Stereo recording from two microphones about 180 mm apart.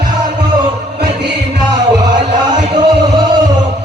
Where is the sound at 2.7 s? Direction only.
25° right (ahead or behind).